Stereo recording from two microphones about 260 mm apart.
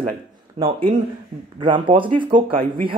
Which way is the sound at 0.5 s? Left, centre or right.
Centre.